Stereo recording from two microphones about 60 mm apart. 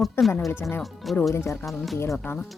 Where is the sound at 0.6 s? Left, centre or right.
Left.